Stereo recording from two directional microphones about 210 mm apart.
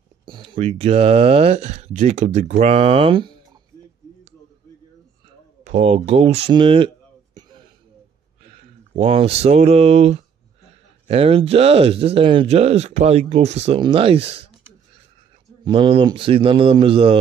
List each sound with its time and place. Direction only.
0.2 s speech: 25° right (ahead or behind)
5.6 s speech: 30° right (ahead or behind)
7.3 s a sound: 20° right (ahead or behind)
8.5 s speech: 30° right (ahead or behind)
15.6 s speech: 25° right (ahead or behind)